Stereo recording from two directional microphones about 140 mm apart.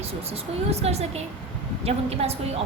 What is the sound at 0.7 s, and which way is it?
A woman's voice, 50° right (ahead or behind).